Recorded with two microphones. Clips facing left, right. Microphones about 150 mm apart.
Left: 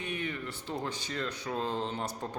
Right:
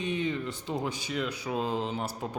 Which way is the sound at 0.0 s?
20° right (ahead or behind).